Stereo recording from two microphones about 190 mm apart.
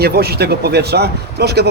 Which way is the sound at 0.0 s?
55° right (ahead or behind).